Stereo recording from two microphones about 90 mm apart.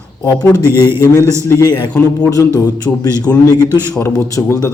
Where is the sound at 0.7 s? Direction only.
25° right (ahead or behind).